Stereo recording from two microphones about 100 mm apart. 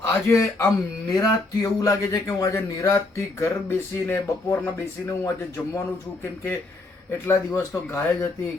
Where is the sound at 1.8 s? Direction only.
35° left (ahead or behind).